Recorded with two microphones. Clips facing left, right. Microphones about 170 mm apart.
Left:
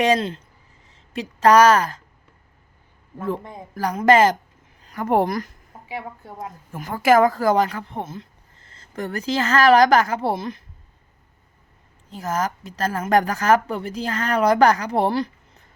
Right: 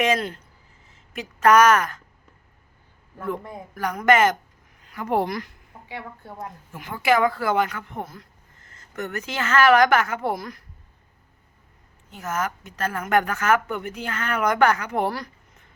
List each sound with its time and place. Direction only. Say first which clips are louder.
0.0 s a woman's voice: left 3 dB; 30° left (ahead or behind)
3.2 s a woman's voice: left 2 dB; 30° left (ahead or behind)
6.7 s a woman's voice: left 5 dB; 40° left (ahead or behind); by 10.6 s 25° left (ahead or behind)
12.1 s a woman's voice: left 3 dB; 35° left (ahead or behind)